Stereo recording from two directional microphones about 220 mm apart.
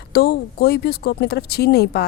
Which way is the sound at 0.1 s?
45° left (ahead or behind).